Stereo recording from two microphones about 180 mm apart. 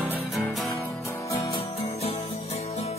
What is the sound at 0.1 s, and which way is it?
Music, centre (ahead or behind).